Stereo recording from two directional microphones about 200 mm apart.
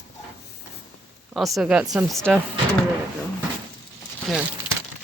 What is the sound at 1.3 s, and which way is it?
Speech, centre (ahead or behind).